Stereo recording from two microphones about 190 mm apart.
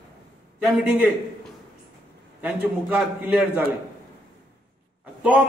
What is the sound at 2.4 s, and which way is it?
A man's voice, 10° right (ahead or behind).